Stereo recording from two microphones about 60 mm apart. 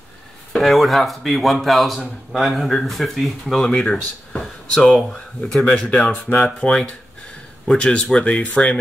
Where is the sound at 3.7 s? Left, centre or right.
Centre.